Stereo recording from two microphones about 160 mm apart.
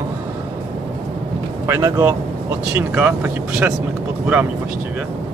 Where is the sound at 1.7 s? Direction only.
20° right (ahead or behind).